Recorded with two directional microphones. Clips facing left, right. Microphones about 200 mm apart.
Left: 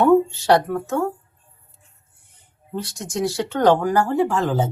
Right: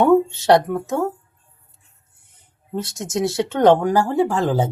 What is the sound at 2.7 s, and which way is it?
Speech, 25° right (ahead or behind).